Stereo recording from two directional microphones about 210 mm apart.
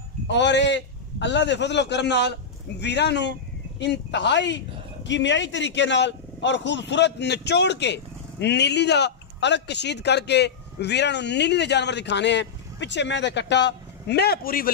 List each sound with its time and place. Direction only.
0.3 s speech: 55° left (ahead or behind)